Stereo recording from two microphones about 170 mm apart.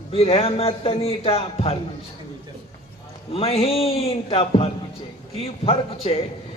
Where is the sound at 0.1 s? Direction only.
35° left (ahead or behind).